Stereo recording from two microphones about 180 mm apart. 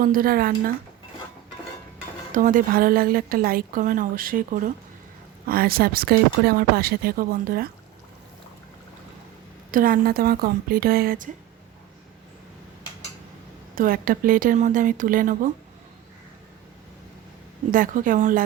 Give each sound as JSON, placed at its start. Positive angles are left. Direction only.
{"t": 0.0, "sound": "a woman's voice", "side_deg": -55}
{"t": 2.3, "sound": "a woman's voice", "side_deg": -50}
{"t": 9.7, "sound": "speech", "side_deg": -50}
{"t": 13.7, "sound": "a woman's voice", "side_deg": -50}
{"t": 17.7, "sound": "a woman's voice", "side_deg": -50}